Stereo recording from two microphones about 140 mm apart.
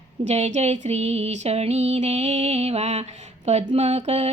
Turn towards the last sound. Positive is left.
turn(degrees=-45)  # may be behind; listen again after turning